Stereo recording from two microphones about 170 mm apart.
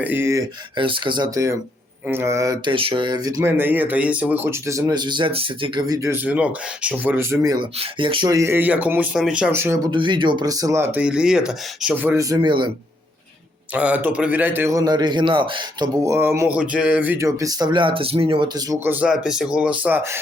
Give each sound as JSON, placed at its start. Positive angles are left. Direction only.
{"t": 0.0, "sound": "speech", "side_deg": -10}
{"t": 0.8, "sound": "speech", "side_deg": -30}
{"t": 13.7, "sound": "speech", "side_deg": -10}